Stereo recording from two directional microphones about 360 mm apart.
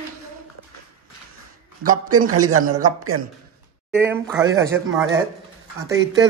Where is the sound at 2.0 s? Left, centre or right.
Right.